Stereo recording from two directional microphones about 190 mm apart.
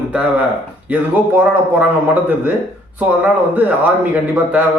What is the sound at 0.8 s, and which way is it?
A man's voice, 10° right (ahead or behind).